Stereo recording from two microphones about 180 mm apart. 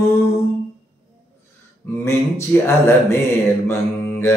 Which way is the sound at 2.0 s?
15° left (ahead or behind).